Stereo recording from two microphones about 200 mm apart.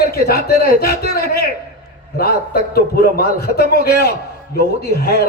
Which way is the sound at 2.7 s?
50° left (ahead or behind).